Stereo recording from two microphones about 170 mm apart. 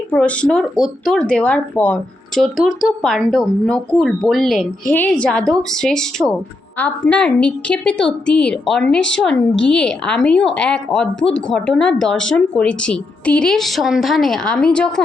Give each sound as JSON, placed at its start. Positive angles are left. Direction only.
{"t": 0.1, "sound": "a woman's voice", "side_deg": 5}